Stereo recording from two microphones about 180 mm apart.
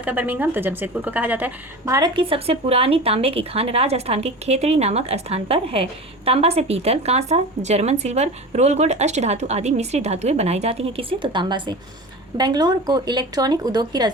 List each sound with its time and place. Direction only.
0.0 s a woman's voice: 10° right (ahead or behind)